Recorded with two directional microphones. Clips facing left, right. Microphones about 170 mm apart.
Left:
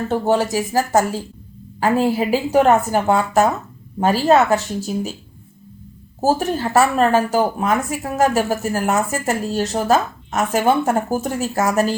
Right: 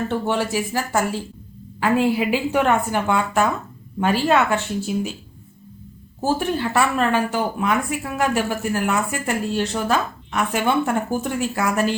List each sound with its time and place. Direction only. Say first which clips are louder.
0.1 s speech: left 4 dB; 40° left (ahead or behind)
6.2 s speech: left 3 dB; 40° left (ahead or behind)